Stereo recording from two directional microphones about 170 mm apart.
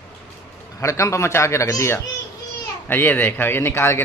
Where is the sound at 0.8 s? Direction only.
15° left (ahead or behind).